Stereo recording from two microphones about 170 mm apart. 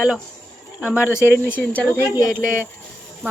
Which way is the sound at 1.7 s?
10° left (ahead or behind).